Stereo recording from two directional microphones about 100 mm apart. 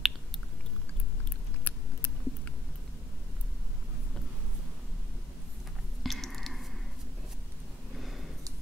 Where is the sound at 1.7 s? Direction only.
20° left (ahead or behind).